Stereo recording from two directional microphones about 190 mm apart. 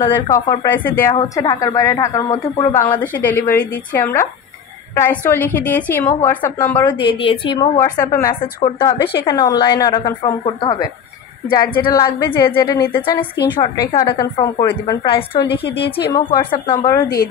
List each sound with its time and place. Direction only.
0.0 s a woman's voice: 15° left (ahead or behind)
1.1 s a woman's voice: 25° left (ahead or behind)
7.0 s a woman's voice: 25° left (ahead or behind)
7.7 s a woman's voice: 15° left (ahead or behind)